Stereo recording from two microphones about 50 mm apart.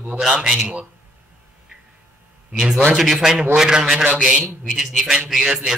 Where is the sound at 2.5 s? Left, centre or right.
Centre.